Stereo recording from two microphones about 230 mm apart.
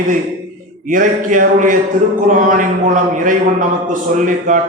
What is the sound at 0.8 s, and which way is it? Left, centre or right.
A man's voice, right.